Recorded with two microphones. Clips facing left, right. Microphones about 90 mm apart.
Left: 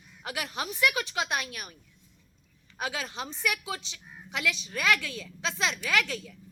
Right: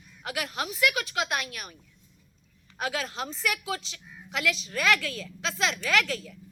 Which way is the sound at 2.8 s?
25° left (ahead or behind).